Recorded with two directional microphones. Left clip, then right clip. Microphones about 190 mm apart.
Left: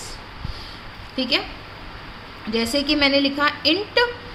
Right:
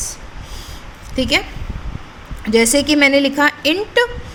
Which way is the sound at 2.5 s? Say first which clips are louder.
Right 8 dB; 50° right (ahead or behind).